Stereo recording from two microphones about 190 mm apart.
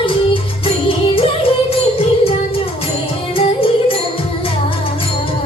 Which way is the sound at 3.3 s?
30° left (ahead or behind).